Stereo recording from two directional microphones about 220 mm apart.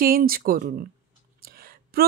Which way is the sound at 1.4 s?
40° right (ahead or behind).